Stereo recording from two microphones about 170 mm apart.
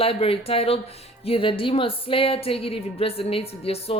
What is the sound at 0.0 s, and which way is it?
Speech, 35° left (ahead or behind).